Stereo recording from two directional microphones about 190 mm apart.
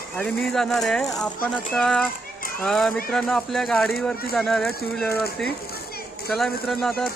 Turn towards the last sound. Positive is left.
turn(degrees=0)  # may be behind; listen again after turning